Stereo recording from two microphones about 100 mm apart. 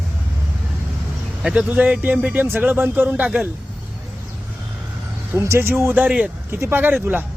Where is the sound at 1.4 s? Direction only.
10° right (ahead or behind).